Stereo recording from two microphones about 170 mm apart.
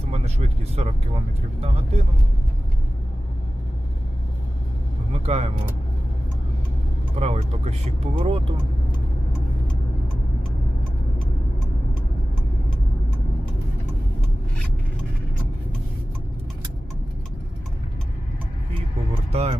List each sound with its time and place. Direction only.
0.1 s speech: 40° right (ahead or behind)
5.2 s speech: 40° right (ahead or behind)
7.2 s speech: 40° right (ahead or behind)
19.3 s speech: 35° right (ahead or behind)